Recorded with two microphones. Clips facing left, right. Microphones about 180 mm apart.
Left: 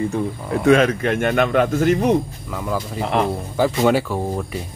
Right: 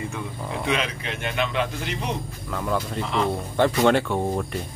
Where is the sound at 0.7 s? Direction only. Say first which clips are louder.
Left 13 dB; 50° left (ahead or behind).